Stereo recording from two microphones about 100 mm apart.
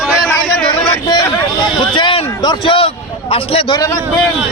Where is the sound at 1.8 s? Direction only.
50° left (ahead or behind).